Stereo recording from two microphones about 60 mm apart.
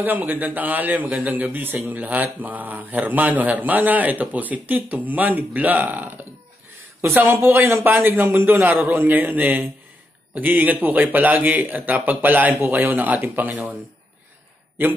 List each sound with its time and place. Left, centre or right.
0.0 s a man's voice: right
8.8 s a man's voice: right